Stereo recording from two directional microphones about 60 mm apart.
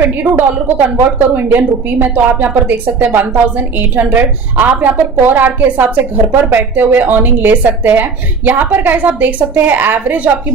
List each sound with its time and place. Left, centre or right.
0.2 s a woman's voice: right